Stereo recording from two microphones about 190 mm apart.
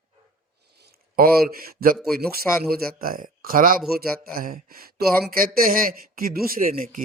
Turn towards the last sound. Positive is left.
turn(degrees=-45)  # may be behind; listen again after turning